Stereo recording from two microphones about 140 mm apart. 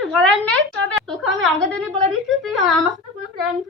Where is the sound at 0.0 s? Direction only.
Centre (ahead or behind).